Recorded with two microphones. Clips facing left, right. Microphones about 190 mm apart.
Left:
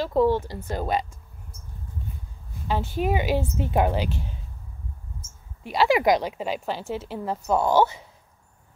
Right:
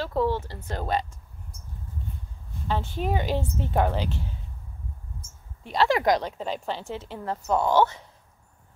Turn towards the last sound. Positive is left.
turn(degrees=10)  # may be behind; listen again after turning